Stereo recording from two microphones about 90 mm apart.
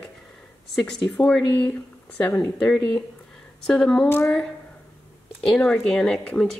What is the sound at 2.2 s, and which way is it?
Speech, 20° left (ahead or behind).